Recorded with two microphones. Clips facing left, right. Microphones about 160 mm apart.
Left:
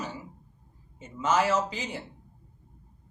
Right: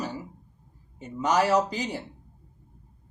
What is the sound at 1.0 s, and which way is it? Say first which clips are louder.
Speech: right 2 dB; 40° right (ahead or behind).